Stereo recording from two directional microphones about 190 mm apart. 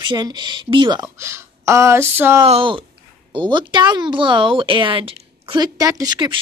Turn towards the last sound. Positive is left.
turn(degrees=-20)  # may be behind; listen again after turning